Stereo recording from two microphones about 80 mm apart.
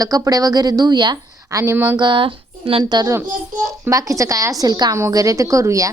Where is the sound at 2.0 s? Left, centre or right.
Right.